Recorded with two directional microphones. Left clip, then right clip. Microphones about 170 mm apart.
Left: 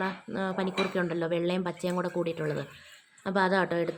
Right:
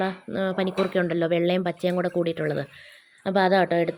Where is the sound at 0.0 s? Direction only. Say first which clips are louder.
Right 5 dB; 25° right (ahead or behind).